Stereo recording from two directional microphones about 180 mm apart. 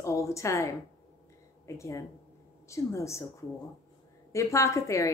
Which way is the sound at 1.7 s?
15° left (ahead or behind).